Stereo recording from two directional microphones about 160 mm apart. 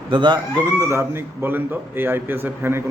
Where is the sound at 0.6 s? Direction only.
20° right (ahead or behind).